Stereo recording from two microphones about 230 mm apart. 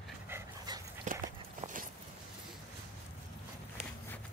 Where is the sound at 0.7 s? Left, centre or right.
Centre.